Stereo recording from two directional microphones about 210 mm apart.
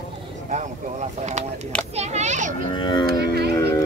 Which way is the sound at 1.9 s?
30° right (ahead or behind).